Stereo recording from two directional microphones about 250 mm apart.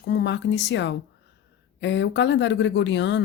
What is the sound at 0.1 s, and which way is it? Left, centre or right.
Speech, left.